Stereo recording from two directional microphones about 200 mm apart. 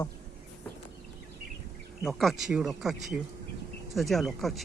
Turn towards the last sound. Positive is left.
turn(degrees=0)  # may be behind; listen again after turning